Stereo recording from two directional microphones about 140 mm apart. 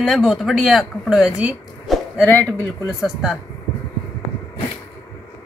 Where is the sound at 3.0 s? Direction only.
Centre (ahead or behind).